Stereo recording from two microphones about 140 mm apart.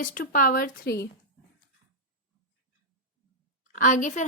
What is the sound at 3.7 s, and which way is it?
Speech, 65° left (ahead or behind).